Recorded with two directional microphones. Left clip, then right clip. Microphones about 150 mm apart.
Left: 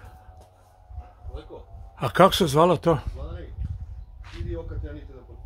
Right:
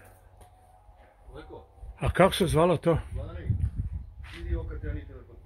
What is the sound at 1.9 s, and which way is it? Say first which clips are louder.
Speech: left 5 dB; 15° left (ahead or behind).